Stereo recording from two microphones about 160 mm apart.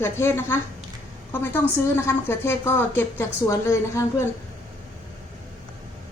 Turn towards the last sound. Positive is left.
turn(degrees=15)  # may be behind; listen again after turning